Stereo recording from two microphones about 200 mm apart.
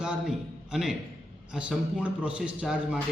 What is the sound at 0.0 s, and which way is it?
A man's voice, 5° right (ahead or behind).